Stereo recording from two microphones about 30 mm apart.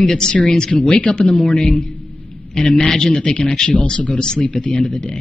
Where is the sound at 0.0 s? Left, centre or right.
Left.